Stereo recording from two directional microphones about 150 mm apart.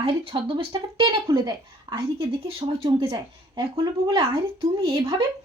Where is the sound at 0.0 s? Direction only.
40° right (ahead or behind).